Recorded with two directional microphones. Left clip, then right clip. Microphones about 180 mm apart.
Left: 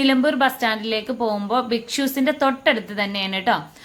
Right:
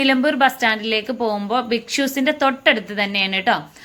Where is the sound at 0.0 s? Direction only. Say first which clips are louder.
Right 2 dB; 15° right (ahead or behind).